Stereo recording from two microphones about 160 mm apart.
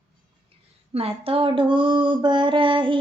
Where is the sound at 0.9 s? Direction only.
35° right (ahead or behind).